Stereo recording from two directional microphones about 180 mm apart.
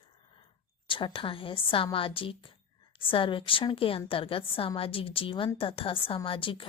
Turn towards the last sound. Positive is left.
turn(degrees=30)  # may be behind; listen again after turning